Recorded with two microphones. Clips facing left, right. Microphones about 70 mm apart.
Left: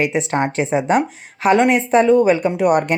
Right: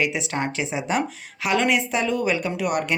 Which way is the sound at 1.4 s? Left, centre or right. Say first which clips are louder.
Left 7 dB; left.